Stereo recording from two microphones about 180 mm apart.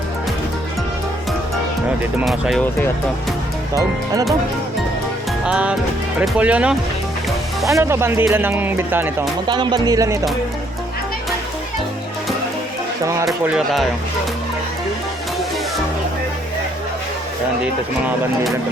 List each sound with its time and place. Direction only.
2.2 s speech: centre (ahead or behind)
3.8 s speech: 20° right (ahead or behind)
5.5 s speech: 5° right (ahead or behind)
9.5 s speech: 25° right (ahead or behind)
13.4 s speech: 5° right (ahead or behind)